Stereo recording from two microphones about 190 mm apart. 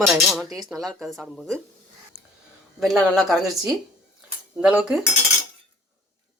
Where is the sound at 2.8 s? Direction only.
Centre (ahead or behind).